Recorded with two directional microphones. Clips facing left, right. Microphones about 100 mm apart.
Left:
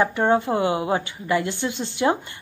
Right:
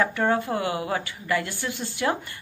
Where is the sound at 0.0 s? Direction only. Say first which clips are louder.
Left 4 dB; 25° left (ahead or behind).